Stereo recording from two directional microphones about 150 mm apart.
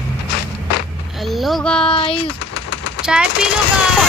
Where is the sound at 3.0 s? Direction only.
5° right (ahead or behind).